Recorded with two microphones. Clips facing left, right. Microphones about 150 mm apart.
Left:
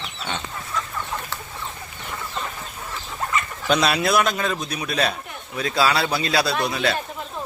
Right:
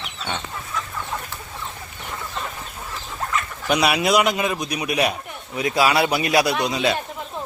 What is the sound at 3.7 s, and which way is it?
A man's voice, 10° right (ahead or behind).